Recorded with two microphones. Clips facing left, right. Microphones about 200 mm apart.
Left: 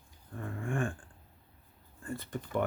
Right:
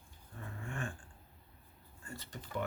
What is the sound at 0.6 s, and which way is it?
Dog, 50° left (ahead or behind).